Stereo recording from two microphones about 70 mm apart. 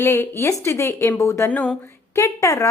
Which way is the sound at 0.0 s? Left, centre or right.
Left.